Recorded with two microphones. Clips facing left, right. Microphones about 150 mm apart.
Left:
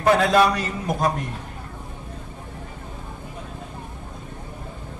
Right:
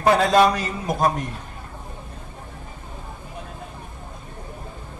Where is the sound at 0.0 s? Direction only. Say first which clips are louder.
Right 1 dB; 30° right (ahead or behind).